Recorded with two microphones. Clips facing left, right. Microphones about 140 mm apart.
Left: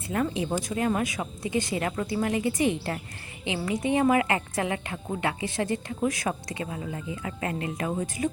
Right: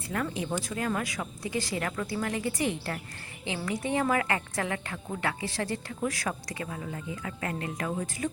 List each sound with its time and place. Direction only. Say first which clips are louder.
0.1 s a woman's voice: left 4 dB; 25° left (ahead or behind)